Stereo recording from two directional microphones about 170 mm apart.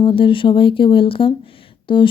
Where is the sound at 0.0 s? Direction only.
30° left (ahead or behind).